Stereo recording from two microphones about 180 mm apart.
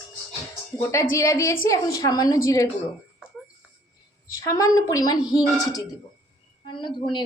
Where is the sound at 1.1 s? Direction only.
15° left (ahead or behind).